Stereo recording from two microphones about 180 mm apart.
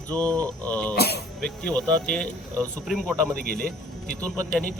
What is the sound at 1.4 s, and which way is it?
A man's voice, 5° left (ahead or behind).